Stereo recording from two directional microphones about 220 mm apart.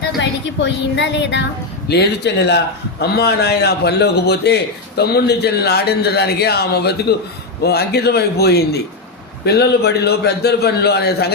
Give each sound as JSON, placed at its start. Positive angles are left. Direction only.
{"t": 0.2, "sound": "a woman's voice", "side_deg": 55}